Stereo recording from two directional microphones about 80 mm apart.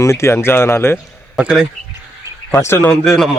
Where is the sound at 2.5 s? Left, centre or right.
Left.